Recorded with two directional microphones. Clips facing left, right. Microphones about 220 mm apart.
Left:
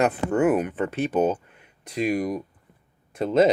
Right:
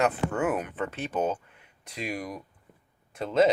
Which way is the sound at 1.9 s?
50° left (ahead or behind).